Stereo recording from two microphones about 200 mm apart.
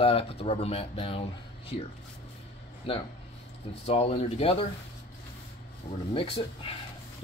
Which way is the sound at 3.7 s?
30° left (ahead or behind).